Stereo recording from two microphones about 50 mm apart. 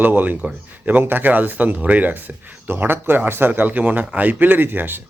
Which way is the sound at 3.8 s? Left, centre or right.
Right.